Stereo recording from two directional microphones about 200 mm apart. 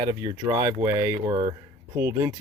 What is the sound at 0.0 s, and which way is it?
Speech, 20° right (ahead or behind).